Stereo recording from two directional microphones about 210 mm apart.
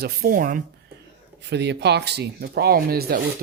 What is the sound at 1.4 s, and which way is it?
Speech, 55° right (ahead or behind).